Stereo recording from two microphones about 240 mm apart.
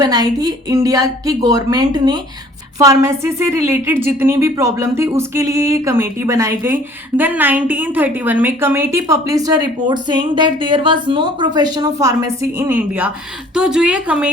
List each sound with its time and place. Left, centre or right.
0.0 s a woman's voice: centre